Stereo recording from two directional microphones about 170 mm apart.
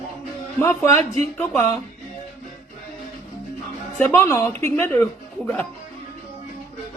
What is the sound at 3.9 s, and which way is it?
Speech, 10° left (ahead or behind).